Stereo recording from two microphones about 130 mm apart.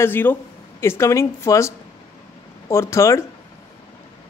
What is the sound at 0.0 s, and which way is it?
Speech, 15° left (ahead or behind).